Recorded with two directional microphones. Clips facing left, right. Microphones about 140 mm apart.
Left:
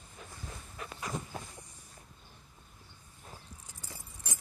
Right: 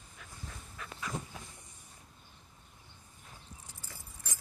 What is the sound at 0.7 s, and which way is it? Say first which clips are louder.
Dog: left 1 dB; 35° left (ahead or behind).